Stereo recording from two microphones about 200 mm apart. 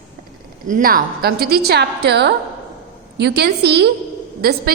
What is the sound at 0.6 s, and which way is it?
A woman's voice, 45° right (ahead or behind).